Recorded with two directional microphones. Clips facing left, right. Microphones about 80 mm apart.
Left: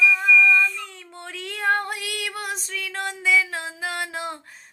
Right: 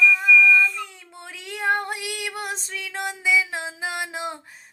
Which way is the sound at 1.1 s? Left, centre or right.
Centre.